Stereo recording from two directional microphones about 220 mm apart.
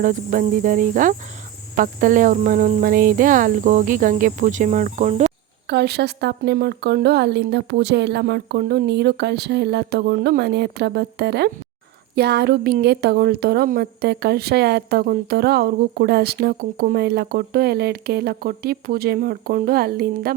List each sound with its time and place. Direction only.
0.0 s speech: 35° right (ahead or behind)
5.6 s a woman's voice: 50° right (ahead or behind)